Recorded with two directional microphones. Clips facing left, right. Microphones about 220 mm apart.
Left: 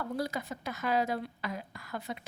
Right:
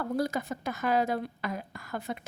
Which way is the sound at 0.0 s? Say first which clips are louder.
Right 4 dB; 50° right (ahead or behind).